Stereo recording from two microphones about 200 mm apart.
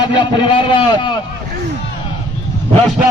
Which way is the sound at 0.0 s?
25° left (ahead or behind).